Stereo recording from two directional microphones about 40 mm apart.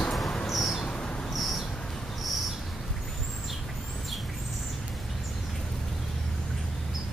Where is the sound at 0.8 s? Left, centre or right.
Left.